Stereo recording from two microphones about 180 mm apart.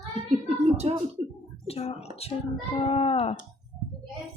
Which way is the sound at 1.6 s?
35° left (ahead or behind).